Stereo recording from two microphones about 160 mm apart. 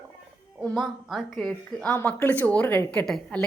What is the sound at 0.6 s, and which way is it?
A woman's voice, centre (ahead or behind).